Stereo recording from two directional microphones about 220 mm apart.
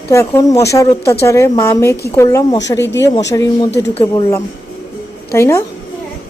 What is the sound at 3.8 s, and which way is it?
Speech, 15° left (ahead or behind).